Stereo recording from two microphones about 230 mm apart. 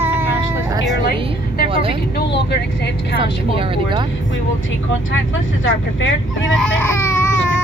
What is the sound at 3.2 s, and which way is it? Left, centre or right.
Speech, right.